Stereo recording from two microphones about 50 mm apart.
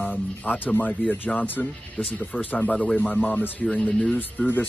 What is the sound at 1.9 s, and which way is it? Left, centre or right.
Speech, left.